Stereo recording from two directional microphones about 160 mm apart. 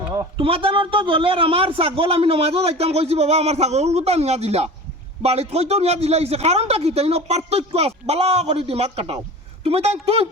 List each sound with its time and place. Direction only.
0.3 s a man's voice: 35° right (ahead or behind)